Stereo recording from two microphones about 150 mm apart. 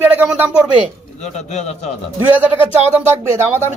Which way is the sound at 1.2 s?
50° left (ahead or behind).